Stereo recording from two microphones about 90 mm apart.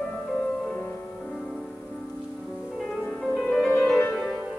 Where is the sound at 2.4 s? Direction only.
15° left (ahead or behind).